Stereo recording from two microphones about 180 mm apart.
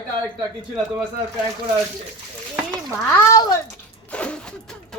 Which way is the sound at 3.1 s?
15° left (ahead or behind).